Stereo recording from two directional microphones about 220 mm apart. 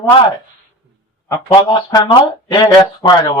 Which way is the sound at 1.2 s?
20° left (ahead or behind).